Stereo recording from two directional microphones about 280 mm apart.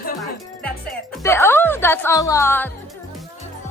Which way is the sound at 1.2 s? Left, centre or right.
Centre.